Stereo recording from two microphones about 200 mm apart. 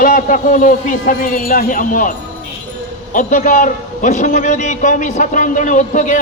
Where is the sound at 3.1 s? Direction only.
40° left (ahead or behind).